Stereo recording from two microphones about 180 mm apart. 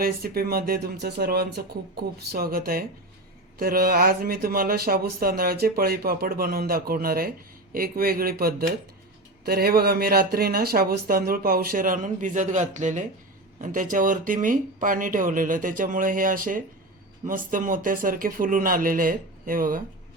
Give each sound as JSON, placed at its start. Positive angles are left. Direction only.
{"t": 0.0, "sound": "speech", "side_deg": -55}